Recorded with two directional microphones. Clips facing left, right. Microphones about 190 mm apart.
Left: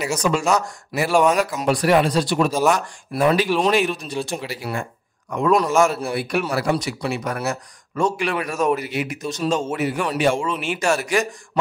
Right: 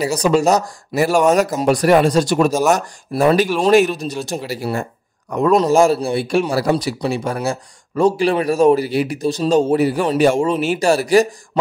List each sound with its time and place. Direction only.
0.0 s a man's voice: 35° right (ahead or behind)